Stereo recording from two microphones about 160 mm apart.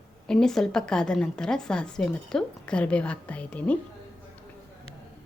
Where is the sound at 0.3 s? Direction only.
5° left (ahead or behind).